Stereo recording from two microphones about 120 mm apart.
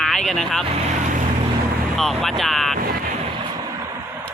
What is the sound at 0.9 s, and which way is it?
Boat, 90° right.